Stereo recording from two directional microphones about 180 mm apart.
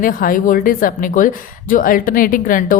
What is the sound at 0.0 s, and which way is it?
A woman's voice, 50° left (ahead or behind).